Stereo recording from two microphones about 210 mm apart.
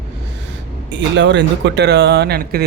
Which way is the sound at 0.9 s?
60° right (ahead or behind).